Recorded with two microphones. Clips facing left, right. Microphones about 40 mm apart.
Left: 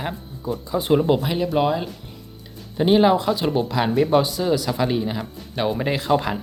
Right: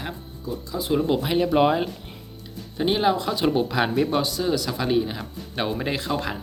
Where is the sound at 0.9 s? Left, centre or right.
Centre.